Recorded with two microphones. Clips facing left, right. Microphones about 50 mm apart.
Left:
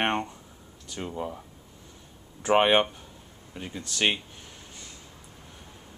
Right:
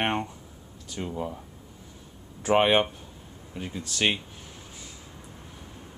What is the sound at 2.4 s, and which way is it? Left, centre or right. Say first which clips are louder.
Speech: even; centre.